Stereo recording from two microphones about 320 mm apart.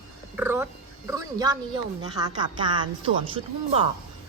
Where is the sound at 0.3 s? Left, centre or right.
Centre.